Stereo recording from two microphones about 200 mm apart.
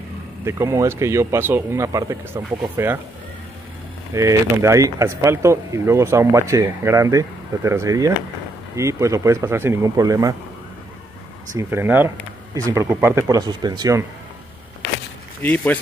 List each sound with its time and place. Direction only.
0.5 s speech: 15° right (ahead or behind)
4.1 s speech: 15° right (ahead or behind)
11.5 s speech: 10° right (ahead or behind)
15.4 s speech: 10° left (ahead or behind)